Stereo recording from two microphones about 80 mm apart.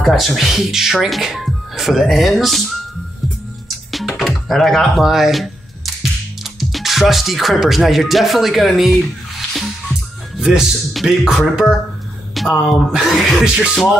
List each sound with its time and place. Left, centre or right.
0.0 s speech: centre
3.9 s music: centre
4.5 s speech: centre
10.3 s speech: centre